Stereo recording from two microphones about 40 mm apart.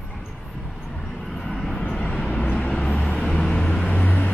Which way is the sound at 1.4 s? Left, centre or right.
Centre.